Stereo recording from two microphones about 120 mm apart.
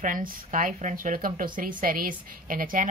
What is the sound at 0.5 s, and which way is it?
Speech, 90° right.